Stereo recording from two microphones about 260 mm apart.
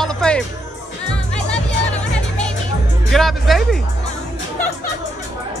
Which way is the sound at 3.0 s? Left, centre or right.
Centre.